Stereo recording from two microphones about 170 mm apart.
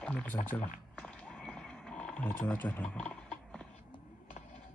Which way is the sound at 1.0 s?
5° left (ahead or behind).